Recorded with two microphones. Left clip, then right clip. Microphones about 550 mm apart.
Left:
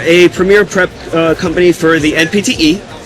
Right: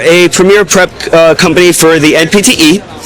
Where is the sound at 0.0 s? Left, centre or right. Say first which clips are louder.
Right 3 dB; right.